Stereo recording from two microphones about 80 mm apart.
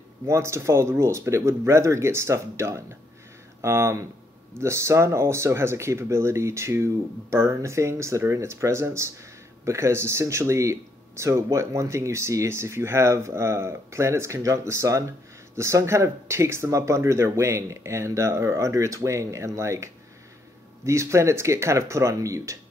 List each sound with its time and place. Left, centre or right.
0.3 s speech: right